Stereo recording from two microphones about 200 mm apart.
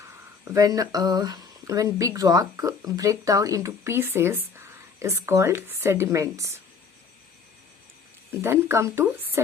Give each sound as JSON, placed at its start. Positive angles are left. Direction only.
{"t": 0.5, "sound": "speech", "side_deg": -15}
{"t": 8.3, "sound": "speech", "side_deg": -10}